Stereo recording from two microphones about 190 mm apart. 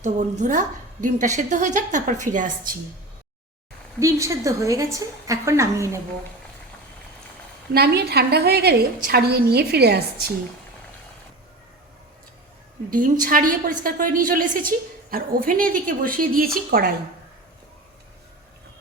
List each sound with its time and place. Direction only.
0.0 s a woman's voice: 40° right (ahead or behind)
4.0 s a woman's voice: 15° right (ahead or behind)
7.7 s a woman's voice: 55° right (ahead or behind)
12.9 s speech: 45° right (ahead or behind)